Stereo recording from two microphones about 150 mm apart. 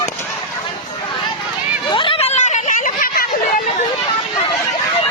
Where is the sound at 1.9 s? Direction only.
35° left (ahead or behind); by 3.2 s 60° left (ahead or behind).